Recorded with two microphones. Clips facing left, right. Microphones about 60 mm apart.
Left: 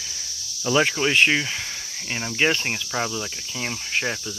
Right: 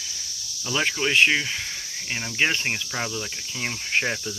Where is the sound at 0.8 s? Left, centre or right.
Centre.